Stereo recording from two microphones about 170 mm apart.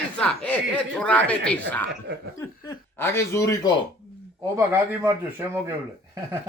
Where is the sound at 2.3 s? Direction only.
20° left (ahead or behind).